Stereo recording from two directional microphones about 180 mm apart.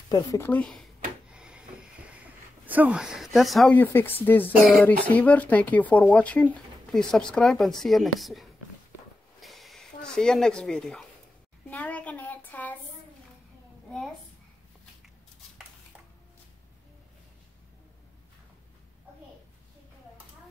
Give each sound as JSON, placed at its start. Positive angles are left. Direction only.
{"t": 0.1, "sound": "speech", "side_deg": 20}
{"t": 0.5, "sound": "speech", "side_deg": 5}
{"t": 1.3, "sound": "a sound", "side_deg": -5}
{"t": 2.6, "sound": "speech", "side_deg": -10}
{"t": 3.8, "sound": "speech", "side_deg": 10}
{"t": 9.4, "sound": "a sound", "side_deg": 0}